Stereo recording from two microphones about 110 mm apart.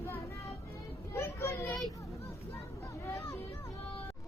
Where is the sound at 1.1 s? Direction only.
25° left (ahead or behind).